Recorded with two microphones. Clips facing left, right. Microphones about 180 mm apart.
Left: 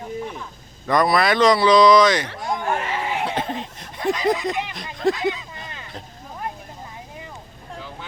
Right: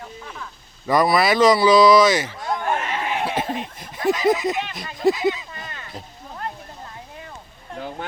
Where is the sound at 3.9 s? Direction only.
5° right (ahead or behind).